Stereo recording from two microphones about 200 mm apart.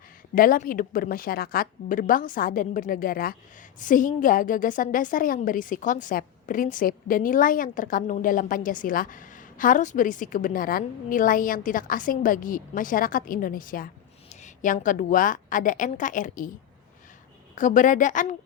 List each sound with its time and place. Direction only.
0.3 s a woman's voice: 45° left (ahead or behind)
17.5 s a woman's voice: 40° left (ahead or behind)